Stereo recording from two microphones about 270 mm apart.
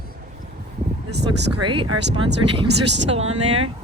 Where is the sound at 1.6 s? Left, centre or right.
Centre.